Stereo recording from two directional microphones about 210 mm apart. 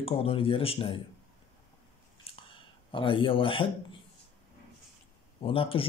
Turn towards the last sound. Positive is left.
turn(degrees=25)  # may be behind; listen again after turning